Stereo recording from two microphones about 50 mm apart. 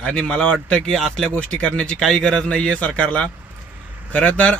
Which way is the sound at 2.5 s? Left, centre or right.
Left.